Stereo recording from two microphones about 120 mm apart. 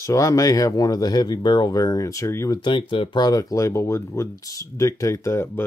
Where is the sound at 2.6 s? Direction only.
45° left (ahead or behind); by 5.6 s 20° left (ahead or behind).